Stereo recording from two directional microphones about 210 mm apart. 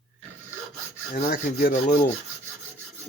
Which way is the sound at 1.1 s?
40° left (ahead or behind).